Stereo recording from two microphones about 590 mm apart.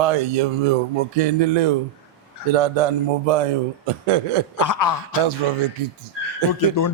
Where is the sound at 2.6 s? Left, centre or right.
Right.